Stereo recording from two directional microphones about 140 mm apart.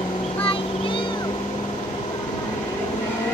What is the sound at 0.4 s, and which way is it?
Vehicle, 40° left (ahead or behind).